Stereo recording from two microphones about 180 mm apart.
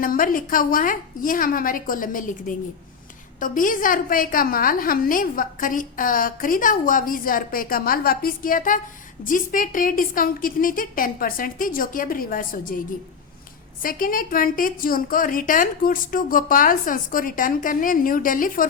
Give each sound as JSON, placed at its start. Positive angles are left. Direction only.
{"t": 0.0, "sound": "a woman's voice", "side_deg": 50}
{"t": 13.8, "sound": "a woman's voice", "side_deg": 50}